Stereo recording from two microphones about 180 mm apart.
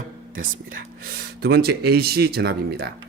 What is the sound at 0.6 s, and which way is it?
Speech, 65° right (ahead or behind).